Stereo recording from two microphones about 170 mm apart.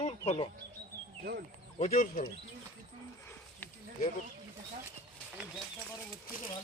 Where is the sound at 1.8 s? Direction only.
45° left (ahead or behind).